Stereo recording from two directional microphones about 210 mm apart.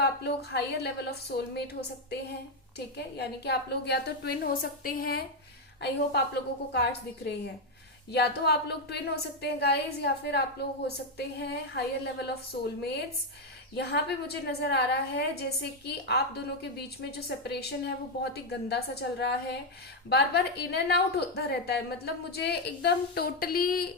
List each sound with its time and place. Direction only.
0.0 s a woman's voice: 50° left (ahead or behind)
8.1 s a woman's voice: 50° left (ahead or behind)
13.7 s a woman's voice: 50° left (ahead or behind)